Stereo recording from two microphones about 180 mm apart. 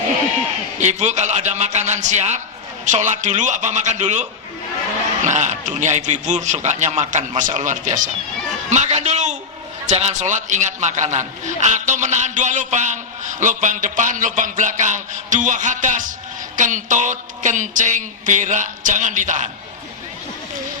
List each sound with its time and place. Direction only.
0.8 s a man's voice: 40° right (ahead or behind)
8.7 s a sound: 40° right (ahead or behind)
9.8 s a man's voice: 40° right (ahead or behind)